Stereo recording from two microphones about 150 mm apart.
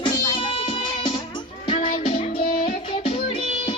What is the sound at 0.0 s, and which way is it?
Music, 35° left (ahead or behind).